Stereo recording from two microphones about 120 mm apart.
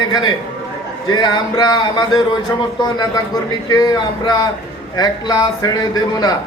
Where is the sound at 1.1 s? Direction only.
35° left (ahead or behind).